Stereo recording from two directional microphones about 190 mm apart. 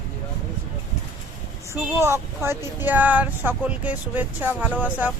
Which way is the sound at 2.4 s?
10° right (ahead or behind).